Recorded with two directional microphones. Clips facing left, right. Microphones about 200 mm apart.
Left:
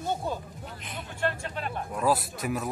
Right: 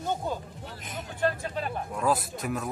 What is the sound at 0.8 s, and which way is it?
Speech, 40° right (ahead or behind).